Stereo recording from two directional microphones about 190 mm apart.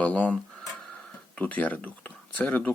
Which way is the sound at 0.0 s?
5° left (ahead or behind).